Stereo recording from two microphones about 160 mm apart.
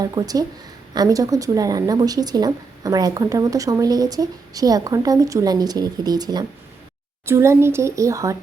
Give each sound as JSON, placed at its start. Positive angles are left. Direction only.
{"t": 0.0, "sound": "a woman's voice", "side_deg": -25}